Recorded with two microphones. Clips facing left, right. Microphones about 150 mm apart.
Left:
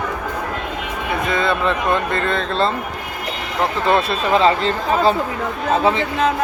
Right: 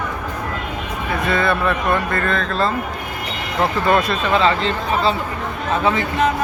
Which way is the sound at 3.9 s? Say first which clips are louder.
Left 2 dB; 30° left (ahead or behind).